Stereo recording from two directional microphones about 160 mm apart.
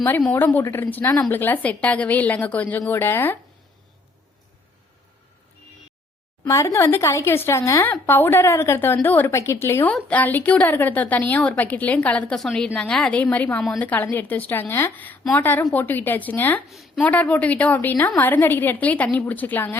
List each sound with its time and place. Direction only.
0.2 s a woman's voice: 10° left (ahead or behind)
6.4 s a woman's voice: 20° left (ahead or behind)
16.6 s a woman's voice: centre (ahead or behind)